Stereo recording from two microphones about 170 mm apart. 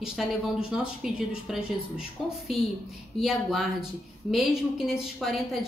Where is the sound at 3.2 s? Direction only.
Centre (ahead or behind).